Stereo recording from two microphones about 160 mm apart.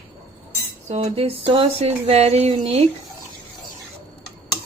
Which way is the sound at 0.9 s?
40° right (ahead or behind).